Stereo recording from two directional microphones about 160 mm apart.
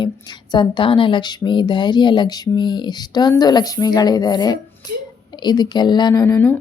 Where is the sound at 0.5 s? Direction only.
30° left (ahead or behind).